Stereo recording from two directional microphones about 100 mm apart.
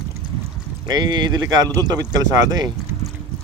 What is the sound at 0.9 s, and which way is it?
Speech, 45° right (ahead or behind).